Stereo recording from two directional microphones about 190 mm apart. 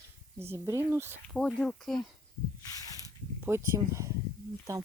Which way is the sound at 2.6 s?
20° left (ahead or behind).